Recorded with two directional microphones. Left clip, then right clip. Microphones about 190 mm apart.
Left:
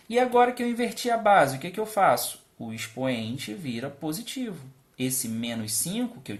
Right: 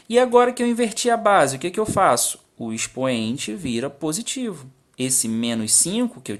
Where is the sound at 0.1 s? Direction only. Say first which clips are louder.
Right 5 dB; 40° right (ahead or behind).